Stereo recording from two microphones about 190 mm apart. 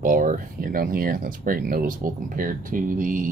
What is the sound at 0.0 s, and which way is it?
Speech, 45° right (ahead or behind).